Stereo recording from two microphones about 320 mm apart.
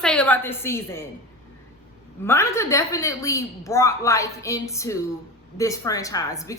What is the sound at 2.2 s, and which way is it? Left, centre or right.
A woman's voice, centre.